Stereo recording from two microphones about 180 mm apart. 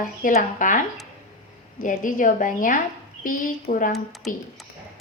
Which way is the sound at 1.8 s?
45° left (ahead or behind).